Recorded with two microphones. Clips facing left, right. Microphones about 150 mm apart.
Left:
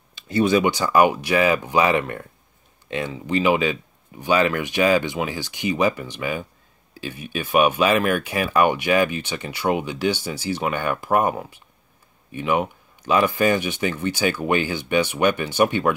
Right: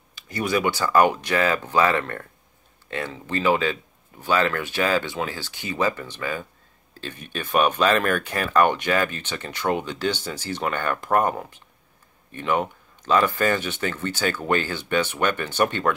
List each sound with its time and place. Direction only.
0.1 s speech: 25° left (ahead or behind)